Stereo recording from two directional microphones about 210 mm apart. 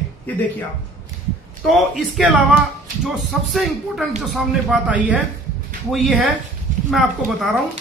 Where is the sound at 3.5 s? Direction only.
Centre (ahead or behind).